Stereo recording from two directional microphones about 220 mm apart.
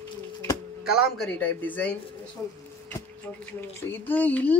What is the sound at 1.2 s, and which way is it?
Speech, 5° left (ahead or behind).